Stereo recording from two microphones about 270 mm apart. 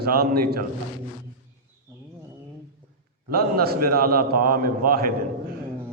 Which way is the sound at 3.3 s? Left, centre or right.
Right.